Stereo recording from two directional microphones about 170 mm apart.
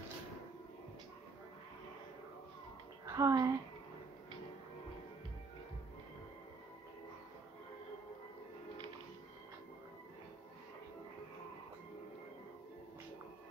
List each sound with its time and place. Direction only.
3.1 s speech: 20° right (ahead or behind)